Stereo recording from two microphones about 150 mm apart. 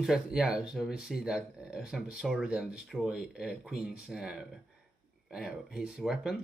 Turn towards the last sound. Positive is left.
turn(degrees=-5)  # may be behind; listen again after turning